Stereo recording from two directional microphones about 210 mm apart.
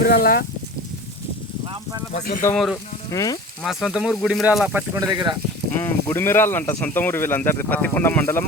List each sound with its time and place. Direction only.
0.0 s speech: 45° left (ahead or behind)
2.1 s speech: 40° left (ahead or behind)
3.1 s speech: 15° left (ahead or behind)
3.6 s speech: centre (ahead or behind)
4.9 s speech: 20° right (ahead or behind)
5.7 s speech: 10° left (ahead or behind)